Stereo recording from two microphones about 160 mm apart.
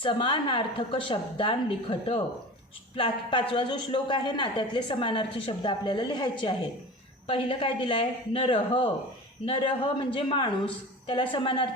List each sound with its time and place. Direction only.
0.0 s a woman's voice: 35° left (ahead or behind)